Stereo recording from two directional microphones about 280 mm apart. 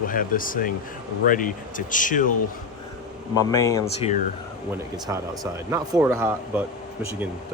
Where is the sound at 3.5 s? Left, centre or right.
Centre.